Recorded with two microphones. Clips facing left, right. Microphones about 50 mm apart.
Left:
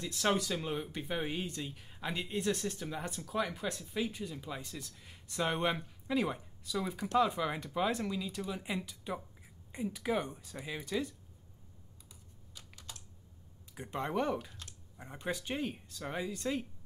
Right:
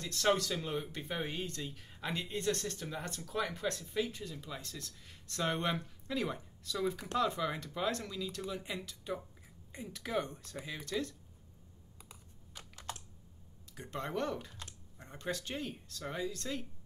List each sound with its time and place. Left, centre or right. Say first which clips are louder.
0.0 s speech: right 1 dB; centre
12.0 s computer keyboard: right 3 dB; right
13.7 s speech: left 3 dB; centre